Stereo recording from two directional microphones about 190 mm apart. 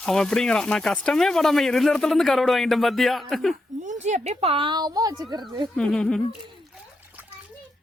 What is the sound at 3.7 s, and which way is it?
Speech, 40° right (ahead or behind).